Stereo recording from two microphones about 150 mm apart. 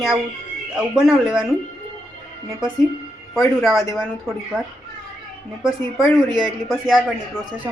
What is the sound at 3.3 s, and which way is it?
Speech, 5° left (ahead or behind).